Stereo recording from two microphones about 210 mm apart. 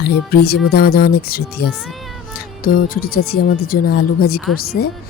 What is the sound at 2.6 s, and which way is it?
Speech, 45° left (ahead or behind).